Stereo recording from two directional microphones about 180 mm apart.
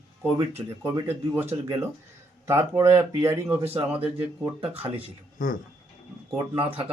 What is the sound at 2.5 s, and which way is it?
Speech, 15° right (ahead or behind).